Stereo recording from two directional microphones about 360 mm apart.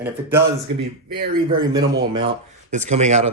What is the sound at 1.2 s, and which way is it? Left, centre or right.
Speech, right.